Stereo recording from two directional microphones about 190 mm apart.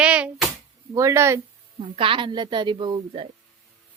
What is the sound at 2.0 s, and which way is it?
A woman's voice, 25° right (ahead or behind).